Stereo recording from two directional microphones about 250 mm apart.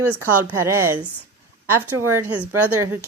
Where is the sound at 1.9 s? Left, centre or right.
Right.